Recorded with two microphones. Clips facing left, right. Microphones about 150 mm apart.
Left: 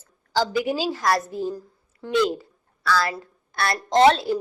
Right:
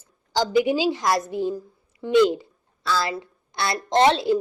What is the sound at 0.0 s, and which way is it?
A woman's voice, 20° right (ahead or behind).